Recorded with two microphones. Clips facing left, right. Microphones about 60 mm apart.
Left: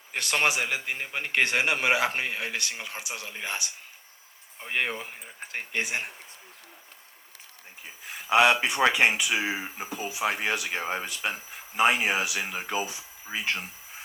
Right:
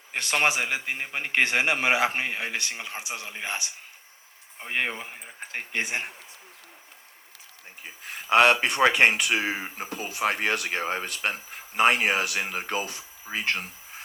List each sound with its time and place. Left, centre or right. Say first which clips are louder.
0.1 s a man's voice: right 1 dB; right
7.8 s speech: right 2 dB; right